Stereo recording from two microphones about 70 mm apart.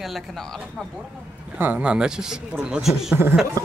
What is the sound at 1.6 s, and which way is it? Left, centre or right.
Speech, centre.